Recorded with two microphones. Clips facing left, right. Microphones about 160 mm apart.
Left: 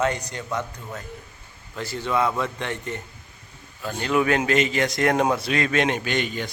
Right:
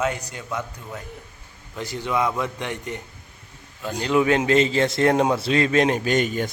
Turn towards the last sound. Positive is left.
turn(degrees=-45)  # may be behind; listen again after turning